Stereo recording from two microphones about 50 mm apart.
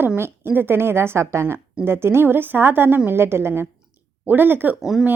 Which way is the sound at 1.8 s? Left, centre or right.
Right.